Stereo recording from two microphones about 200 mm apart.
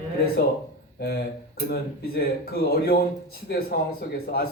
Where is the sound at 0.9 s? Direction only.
50° left (ahead or behind).